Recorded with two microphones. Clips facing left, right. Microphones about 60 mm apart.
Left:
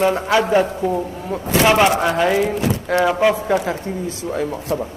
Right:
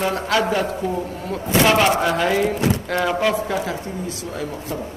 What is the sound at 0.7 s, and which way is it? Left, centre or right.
A man's voice, centre.